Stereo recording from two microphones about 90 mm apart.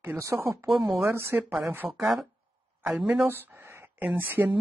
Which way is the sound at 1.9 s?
5° right (ahead or behind).